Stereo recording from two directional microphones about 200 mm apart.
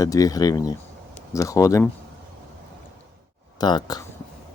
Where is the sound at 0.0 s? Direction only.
15° left (ahead or behind).